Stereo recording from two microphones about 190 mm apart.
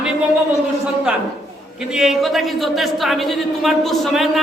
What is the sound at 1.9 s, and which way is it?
Speech, centre (ahead or behind).